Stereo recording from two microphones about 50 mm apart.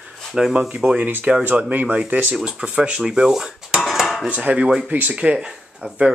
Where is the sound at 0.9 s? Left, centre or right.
Right.